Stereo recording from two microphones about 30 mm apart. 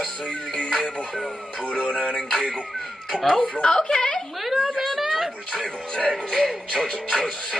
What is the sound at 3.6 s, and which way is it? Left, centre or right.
Speech, left.